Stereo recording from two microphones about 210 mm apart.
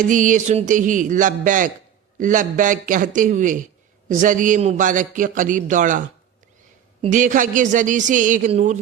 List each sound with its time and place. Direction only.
0.1 s a man's voice: 40° right (ahead or behind)
7.0 s a man's voice: 40° right (ahead or behind)